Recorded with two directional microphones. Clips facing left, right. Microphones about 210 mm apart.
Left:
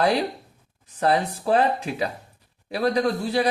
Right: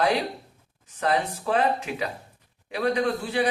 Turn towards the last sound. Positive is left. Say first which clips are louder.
# left 2 dB
turn(degrees=35)  # may be behind; listen again after turning